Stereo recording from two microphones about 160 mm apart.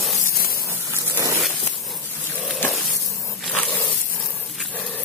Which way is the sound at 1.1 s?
20° right (ahead or behind).